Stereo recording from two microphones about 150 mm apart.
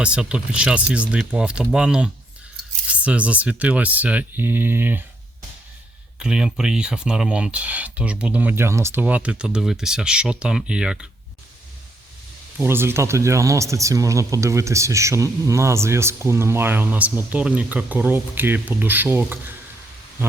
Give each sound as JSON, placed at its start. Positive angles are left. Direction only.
{"t": 0.0, "sound": "speech", "side_deg": -5}
{"t": 6.1, "sound": "speech", "side_deg": -5}
{"t": 12.5, "sound": "speech", "side_deg": -15}